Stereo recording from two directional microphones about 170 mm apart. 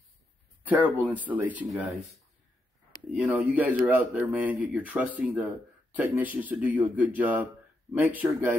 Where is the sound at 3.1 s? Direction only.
5° right (ahead or behind).